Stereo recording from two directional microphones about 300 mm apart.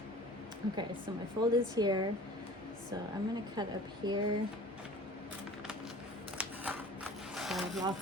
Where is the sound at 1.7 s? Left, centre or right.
Centre.